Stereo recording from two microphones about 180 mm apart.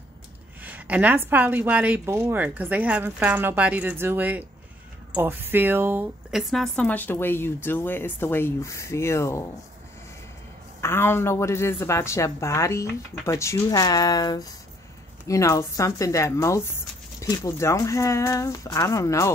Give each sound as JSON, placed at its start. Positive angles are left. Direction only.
{"t": 0.6, "sound": "a woman's voice", "side_deg": -10}
{"t": 6.5, "sound": "a woman's voice", "side_deg": 5}
{"t": 10.8, "sound": "a woman's voice", "side_deg": 15}